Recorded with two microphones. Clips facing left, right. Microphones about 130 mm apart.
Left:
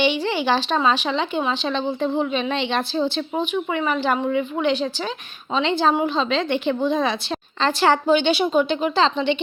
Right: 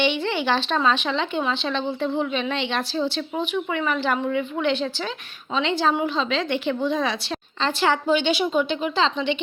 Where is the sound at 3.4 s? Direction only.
20° left (ahead or behind).